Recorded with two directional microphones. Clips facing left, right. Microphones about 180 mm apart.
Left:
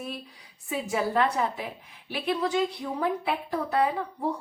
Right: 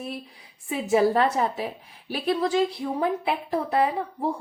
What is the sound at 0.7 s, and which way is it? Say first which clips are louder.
A woman's voice: right 7 dB; 30° right (ahead or behind).